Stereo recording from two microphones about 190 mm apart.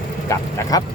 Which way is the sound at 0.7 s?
20° left (ahead or behind).